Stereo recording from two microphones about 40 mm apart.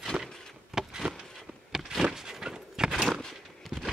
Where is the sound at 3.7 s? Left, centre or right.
Centre.